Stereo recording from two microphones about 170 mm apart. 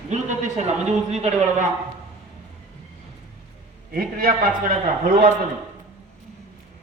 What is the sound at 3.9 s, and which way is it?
Speech, 55° right (ahead or behind).